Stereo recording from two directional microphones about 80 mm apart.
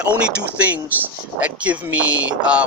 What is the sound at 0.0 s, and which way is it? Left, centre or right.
Speech, centre.